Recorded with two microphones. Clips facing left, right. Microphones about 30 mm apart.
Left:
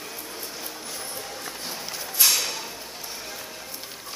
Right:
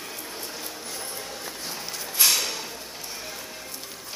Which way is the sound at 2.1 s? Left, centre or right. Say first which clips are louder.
Even; centre.